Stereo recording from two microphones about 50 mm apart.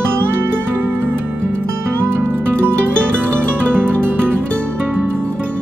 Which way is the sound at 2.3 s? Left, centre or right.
Right.